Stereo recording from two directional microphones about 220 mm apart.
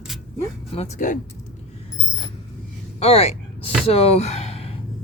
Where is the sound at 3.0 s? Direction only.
30° left (ahead or behind).